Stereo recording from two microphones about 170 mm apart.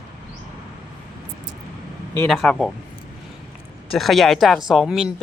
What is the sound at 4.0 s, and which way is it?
Speech, centre (ahead or behind).